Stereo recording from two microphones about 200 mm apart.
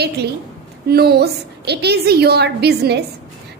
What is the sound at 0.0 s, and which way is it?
A woman's voice, 55° right (ahead or behind).